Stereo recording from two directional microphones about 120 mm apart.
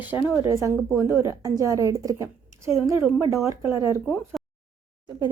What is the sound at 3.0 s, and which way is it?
Speech, 5° right (ahead or behind).